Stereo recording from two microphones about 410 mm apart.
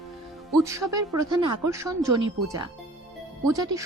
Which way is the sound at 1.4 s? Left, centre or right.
Right.